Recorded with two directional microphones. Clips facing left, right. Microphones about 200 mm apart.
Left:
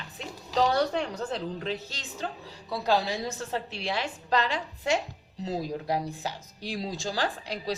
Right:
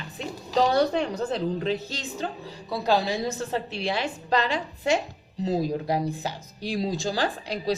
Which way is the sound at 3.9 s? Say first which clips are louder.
Right 2 dB; 15° right (ahead or behind).